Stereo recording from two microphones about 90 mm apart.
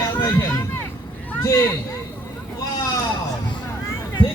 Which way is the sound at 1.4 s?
35° left (ahead or behind).